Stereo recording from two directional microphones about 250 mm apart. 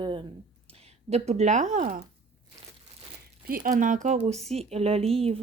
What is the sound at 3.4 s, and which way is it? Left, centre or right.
Speech, right.